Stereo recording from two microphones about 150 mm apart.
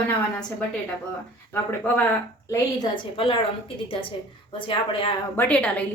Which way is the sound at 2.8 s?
35° left (ahead or behind).